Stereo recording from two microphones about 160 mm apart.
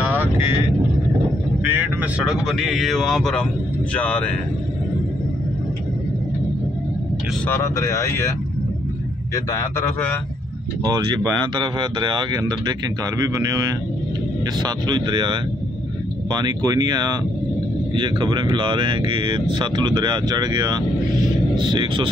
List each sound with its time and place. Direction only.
0.0 s vehicle: 10° right (ahead or behind)
1.7 s a man's voice: 10° right (ahead or behind); by 4.3 s 10° left (ahead or behind)
7.4 s speech: 15° left (ahead or behind)
9.3 s a man's voice: 20° left (ahead or behind)
10.8 s speech: 25° right (ahead or behind)
14.6 s speech: 25° right (ahead or behind)